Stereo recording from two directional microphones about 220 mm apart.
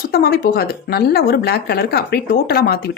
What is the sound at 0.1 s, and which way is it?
Speech, 45° left (ahead or behind).